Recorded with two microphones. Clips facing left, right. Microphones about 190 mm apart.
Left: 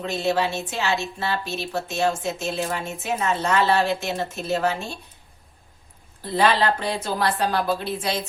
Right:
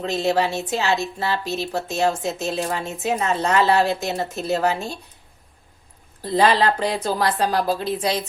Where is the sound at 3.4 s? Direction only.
40° right (ahead or behind).